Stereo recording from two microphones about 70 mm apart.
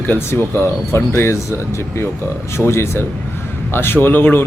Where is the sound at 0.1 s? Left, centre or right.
Left.